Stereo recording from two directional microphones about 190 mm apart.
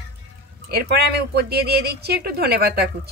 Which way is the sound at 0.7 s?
55° right (ahead or behind).